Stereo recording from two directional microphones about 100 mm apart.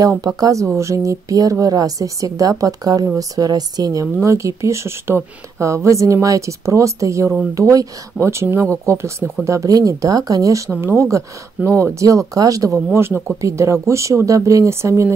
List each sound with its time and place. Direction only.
0.4 s speech: 35° right (ahead or behind)
10.7 s speech: 25° right (ahead or behind)